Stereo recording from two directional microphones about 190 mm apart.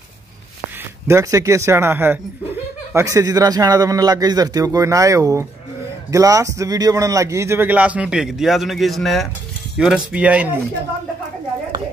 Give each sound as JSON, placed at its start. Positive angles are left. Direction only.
{"t": 1.0, "sound": "a man's voice", "side_deg": -15}